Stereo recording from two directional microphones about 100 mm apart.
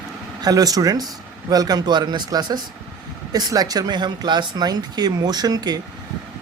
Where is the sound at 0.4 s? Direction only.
40° right (ahead or behind).